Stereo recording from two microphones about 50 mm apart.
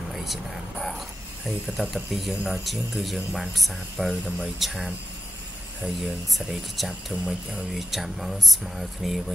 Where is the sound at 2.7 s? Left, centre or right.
Centre.